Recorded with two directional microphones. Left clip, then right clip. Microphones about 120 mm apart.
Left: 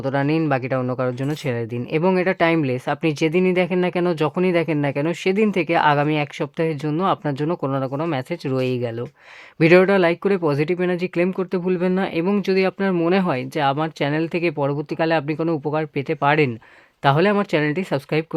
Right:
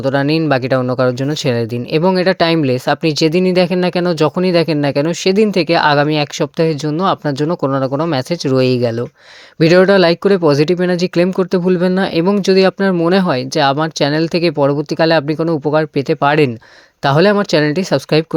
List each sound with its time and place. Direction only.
0.0 s speech: 35° right (ahead or behind)
9.6 s speech: 30° right (ahead or behind)